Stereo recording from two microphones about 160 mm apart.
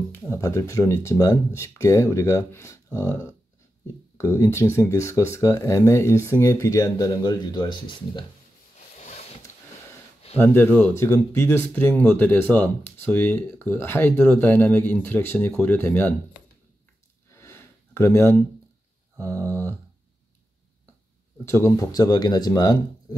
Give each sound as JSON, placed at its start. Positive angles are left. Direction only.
{"t": 0.1, "sound": "speech", "side_deg": 15}
{"t": 8.9, "sound": "a sound", "side_deg": 45}
{"t": 10.3, "sound": "speech", "side_deg": 15}
{"t": 17.3, "sound": "a sound", "side_deg": 15}
{"t": 19.1, "sound": "speech", "side_deg": 15}
{"t": 21.5, "sound": "speech", "side_deg": 20}